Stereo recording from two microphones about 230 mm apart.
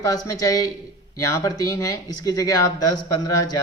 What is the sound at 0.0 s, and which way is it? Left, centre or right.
Speech, centre.